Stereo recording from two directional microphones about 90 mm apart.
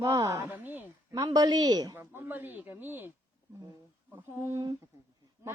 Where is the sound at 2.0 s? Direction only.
25° right (ahead or behind).